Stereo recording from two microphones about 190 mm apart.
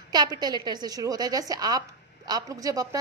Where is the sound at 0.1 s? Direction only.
20° right (ahead or behind).